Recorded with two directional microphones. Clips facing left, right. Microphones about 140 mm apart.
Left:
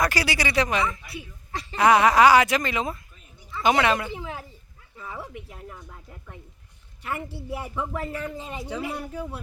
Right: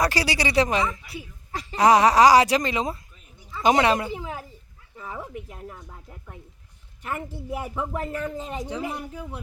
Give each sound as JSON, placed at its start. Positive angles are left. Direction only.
{"t": 0.0, "sound": "speech", "side_deg": -30}
{"t": 7.0, "sound": "a woman's voice", "side_deg": -45}
{"t": 8.6, "sound": "speech", "side_deg": -15}